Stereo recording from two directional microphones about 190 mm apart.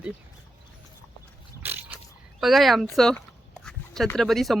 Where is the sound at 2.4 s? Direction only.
Centre (ahead or behind).